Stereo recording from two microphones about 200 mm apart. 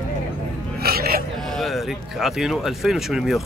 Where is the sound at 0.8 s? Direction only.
50° right (ahead or behind).